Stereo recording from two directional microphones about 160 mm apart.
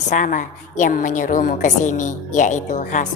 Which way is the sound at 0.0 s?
50° left (ahead or behind).